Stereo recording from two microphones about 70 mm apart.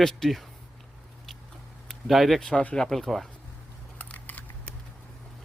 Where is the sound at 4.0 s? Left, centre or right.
Left.